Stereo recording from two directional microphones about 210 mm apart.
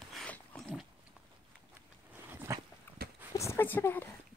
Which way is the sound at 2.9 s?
10° left (ahead or behind).